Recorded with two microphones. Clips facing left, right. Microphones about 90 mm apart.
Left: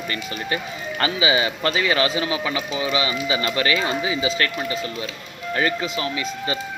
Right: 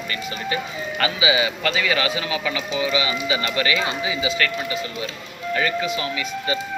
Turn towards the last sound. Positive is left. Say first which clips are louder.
# even
turn(degrees=30)  # may be behind; listen again after turning